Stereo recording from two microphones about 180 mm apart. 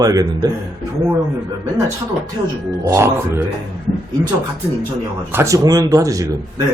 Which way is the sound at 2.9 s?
15° right (ahead or behind).